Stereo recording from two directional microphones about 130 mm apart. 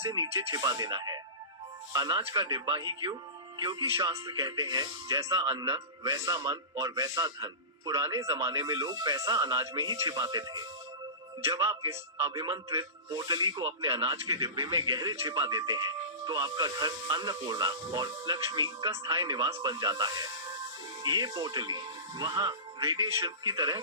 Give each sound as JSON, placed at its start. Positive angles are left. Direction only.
{"t": 0.1, "sound": "speech", "side_deg": -30}
{"t": 12.3, "sound": "speech", "side_deg": -35}
{"t": 14.1, "sound": "speech", "side_deg": -25}